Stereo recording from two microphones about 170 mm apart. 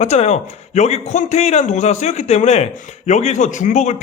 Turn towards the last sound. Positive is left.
turn(degrees=45)  # may be behind; listen again after turning